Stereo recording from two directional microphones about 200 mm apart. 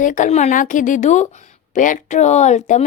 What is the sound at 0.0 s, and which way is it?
Speech, 40° left (ahead or behind).